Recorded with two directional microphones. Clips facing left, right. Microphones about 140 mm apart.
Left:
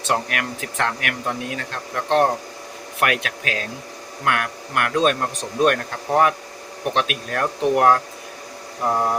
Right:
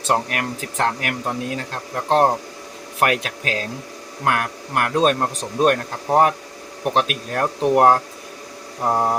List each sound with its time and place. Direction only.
0.1 s speech: 35° right (ahead or behind)